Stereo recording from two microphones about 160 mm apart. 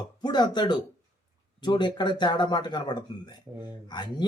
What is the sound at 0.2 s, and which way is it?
A man's voice, 25° left (ahead or behind).